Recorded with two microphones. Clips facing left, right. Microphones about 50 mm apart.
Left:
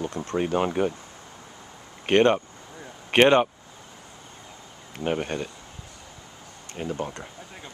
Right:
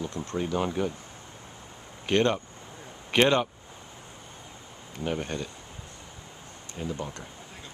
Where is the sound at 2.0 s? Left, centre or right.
Left.